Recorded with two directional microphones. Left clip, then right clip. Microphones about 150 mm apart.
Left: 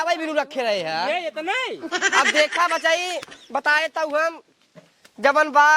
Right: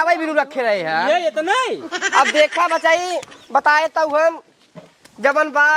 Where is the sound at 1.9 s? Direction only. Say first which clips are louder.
Right 3 dB; centre (ahead or behind).